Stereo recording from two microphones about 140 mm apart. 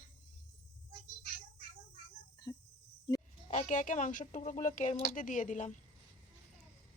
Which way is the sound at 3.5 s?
60° left (ahead or behind).